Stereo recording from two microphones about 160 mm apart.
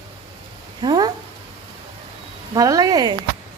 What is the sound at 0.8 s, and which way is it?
Speech, 25° right (ahead or behind).